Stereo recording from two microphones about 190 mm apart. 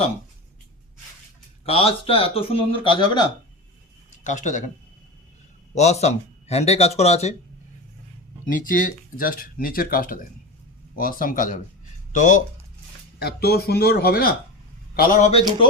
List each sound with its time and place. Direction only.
1.6 s speech: 30° left (ahead or behind)
4.2 s speech: 40° left (ahead or behind)
5.7 s speech: 35° left (ahead or behind)
8.4 s speech: 45° left (ahead or behind)
13.1 s speech: 55° left (ahead or behind)